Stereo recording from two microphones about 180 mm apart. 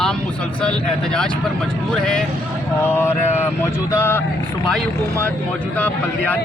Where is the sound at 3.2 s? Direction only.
40° left (ahead or behind).